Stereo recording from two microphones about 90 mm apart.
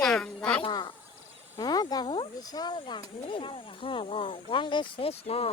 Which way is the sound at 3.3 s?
75° left (ahead or behind).